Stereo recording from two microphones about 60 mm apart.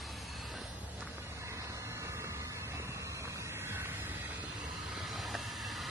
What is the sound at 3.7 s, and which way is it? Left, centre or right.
Music, right.